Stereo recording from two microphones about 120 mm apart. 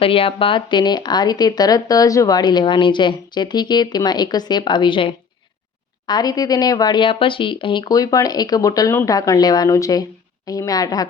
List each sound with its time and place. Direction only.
0.0 s a woman's voice: 50° left (ahead or behind)
6.1 s a woman's voice: 35° left (ahead or behind)